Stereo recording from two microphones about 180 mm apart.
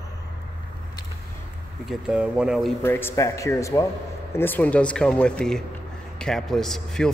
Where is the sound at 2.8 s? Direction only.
10° left (ahead or behind).